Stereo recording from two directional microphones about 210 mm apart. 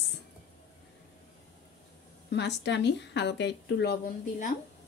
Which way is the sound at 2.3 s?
55° left (ahead or behind).